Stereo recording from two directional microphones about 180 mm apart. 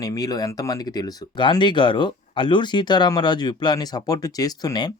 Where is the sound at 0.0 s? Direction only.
20° left (ahead or behind).